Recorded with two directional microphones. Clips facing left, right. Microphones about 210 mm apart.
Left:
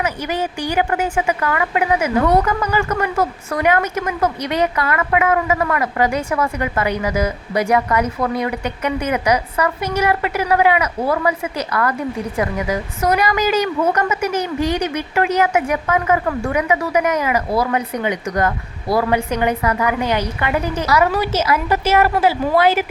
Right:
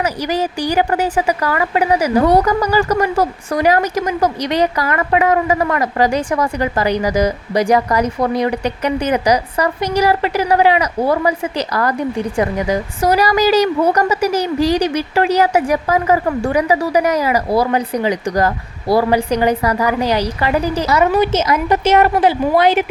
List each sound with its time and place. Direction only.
0.0 s a woman's voice: 35° right (ahead or behind)